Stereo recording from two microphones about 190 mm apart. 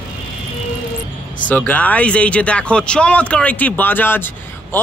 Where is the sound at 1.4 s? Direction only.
10° left (ahead or behind).